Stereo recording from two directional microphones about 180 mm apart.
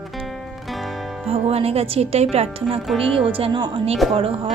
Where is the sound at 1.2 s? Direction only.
35° right (ahead or behind).